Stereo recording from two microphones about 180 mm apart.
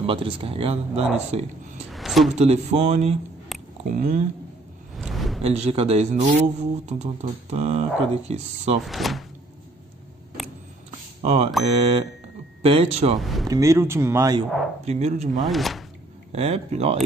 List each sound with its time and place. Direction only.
0.0 s speech: 30° right (ahead or behind)
1.9 s a sound: centre (ahead or behind)
2.3 s speech: 35° right (ahead or behind)
3.5 s a sound: centre (ahead or behind)
3.9 s speech: 45° right (ahead or behind)
4.9 s a sound: centre (ahead or behind)
5.4 s speech: 35° right (ahead or behind)
8.8 s speech: centre (ahead or behind)
11.2 s speech: 35° right (ahead or behind)
13.2 s speech: centre (ahead or behind)
13.5 s speech: 15° right (ahead or behind)
14.9 s speech: 40° right (ahead or behind)
15.3 s speech: centre (ahead or behind)
16.3 s speech: 35° right (ahead or behind)